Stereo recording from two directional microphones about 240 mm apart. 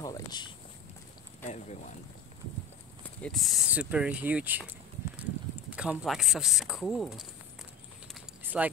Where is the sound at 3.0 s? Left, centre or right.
Centre.